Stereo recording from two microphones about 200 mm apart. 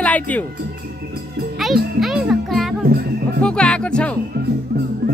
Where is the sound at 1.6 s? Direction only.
Centre (ahead or behind).